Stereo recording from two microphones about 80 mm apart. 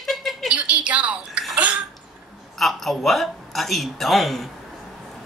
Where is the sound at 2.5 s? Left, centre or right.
Centre.